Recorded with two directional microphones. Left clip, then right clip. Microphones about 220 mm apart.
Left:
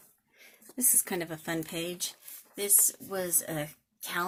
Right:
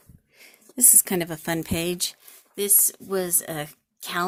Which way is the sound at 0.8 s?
40° right (ahead or behind).